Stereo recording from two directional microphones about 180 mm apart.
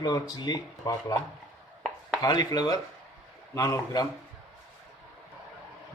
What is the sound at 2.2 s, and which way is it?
Speech, 20° left (ahead or behind).